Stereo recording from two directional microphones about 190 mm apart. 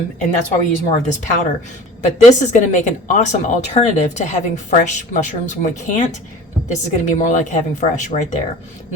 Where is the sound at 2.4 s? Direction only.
40° left (ahead or behind).